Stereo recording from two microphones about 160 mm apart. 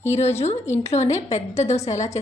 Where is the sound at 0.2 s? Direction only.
40° left (ahead or behind).